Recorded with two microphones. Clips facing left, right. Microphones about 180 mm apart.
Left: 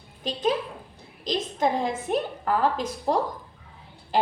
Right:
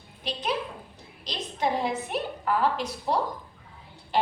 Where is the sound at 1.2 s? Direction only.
45° left (ahead or behind).